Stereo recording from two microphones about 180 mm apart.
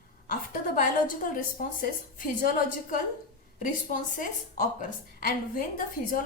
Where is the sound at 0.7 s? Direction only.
50° left (ahead or behind).